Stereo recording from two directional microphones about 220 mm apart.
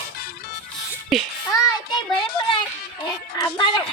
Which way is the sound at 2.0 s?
20° left (ahead or behind).